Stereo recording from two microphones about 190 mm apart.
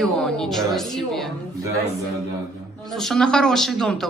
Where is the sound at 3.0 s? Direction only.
Centre (ahead or behind).